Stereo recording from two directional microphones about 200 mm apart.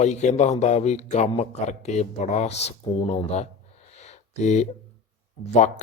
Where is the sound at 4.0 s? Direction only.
35° left (ahead or behind).